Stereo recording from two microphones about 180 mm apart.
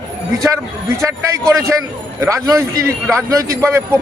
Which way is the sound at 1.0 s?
15° right (ahead or behind).